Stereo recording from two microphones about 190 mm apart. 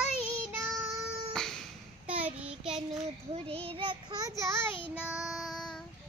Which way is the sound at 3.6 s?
25° right (ahead or behind).